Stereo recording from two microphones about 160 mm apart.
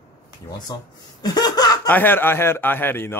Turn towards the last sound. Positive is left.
turn(degrees=15)  # may be behind; listen again after turning